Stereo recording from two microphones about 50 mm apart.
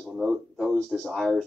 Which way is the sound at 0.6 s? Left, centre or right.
Centre.